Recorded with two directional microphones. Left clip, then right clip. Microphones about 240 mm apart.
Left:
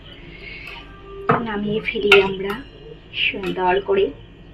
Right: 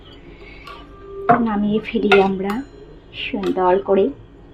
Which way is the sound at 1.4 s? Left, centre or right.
Right.